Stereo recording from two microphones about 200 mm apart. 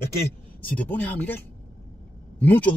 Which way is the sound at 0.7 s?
10° left (ahead or behind).